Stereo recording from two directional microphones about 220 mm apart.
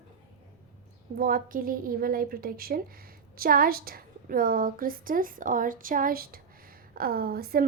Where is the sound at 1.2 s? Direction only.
40° right (ahead or behind).